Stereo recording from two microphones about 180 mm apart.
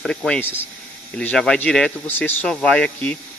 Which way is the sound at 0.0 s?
5° left (ahead or behind).